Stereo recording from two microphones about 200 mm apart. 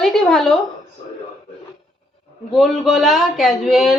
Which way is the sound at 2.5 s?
Centre (ahead or behind).